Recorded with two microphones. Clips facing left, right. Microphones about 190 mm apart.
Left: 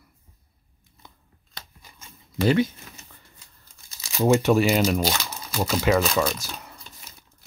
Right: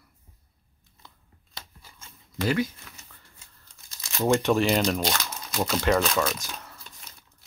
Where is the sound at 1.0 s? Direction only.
15° left (ahead or behind).